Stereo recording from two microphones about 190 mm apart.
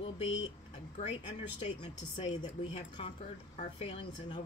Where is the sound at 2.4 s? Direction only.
35° left (ahead or behind).